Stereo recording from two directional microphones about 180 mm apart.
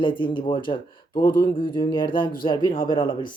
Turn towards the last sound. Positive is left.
turn(degrees=25)  # may be behind; listen again after turning